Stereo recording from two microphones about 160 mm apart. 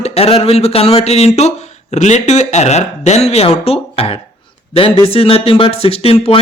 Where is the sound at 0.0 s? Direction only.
40° left (ahead or behind).